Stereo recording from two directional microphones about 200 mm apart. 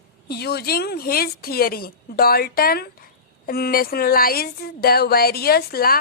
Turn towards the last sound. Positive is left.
turn(degrees=50)  # may be behind; listen again after turning